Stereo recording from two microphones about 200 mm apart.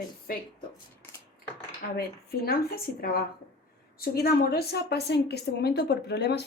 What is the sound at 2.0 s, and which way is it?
Speech, 50° left (ahead or behind).